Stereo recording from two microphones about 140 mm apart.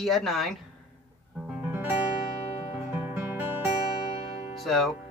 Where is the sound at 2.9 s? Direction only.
15° right (ahead or behind).